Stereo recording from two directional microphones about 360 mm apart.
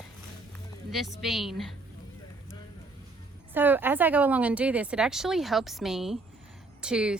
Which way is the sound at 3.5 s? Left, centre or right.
Centre.